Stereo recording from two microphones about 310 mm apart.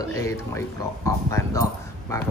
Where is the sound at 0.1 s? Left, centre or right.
Centre.